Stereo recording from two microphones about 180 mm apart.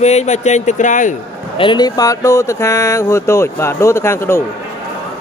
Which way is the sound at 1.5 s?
25° left (ahead or behind).